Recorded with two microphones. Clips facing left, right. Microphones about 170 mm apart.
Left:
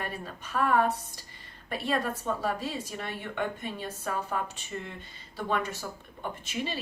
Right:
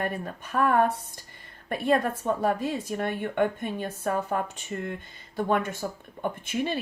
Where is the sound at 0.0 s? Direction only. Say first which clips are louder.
Right 6 dB; 55° right (ahead or behind).